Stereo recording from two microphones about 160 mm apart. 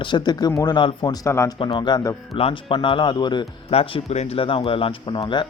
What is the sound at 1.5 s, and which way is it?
Speech, 30° left (ahead or behind).